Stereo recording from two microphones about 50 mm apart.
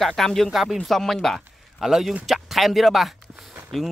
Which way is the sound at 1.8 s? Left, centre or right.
Centre.